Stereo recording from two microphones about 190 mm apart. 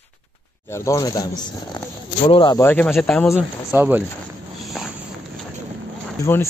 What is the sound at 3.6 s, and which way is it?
Speech, 10° right (ahead or behind).